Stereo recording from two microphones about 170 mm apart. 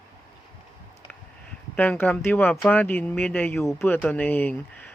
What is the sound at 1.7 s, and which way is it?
Speech, 10° left (ahead or behind).